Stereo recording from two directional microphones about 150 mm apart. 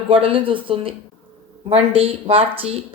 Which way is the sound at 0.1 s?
35° right (ahead or behind).